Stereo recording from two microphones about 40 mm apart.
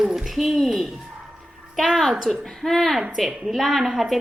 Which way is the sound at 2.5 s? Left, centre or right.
Centre.